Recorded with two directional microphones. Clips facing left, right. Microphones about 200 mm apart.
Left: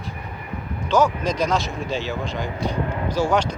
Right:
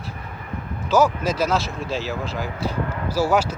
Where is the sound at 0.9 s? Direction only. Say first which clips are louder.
Right 1 dB; 5° right (ahead or behind).